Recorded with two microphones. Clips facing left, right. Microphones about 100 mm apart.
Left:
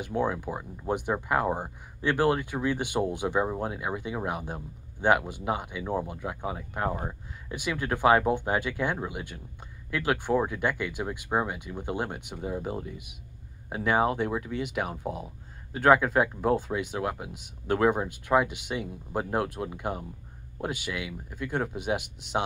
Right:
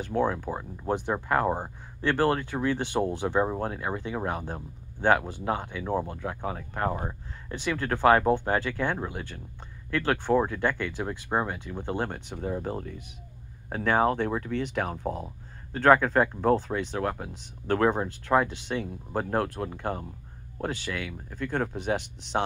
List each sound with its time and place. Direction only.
0.3 s speech: 10° left (ahead or behind)
6.9 s speech: 5° right (ahead or behind)
7.5 s speech: 10° left (ahead or behind)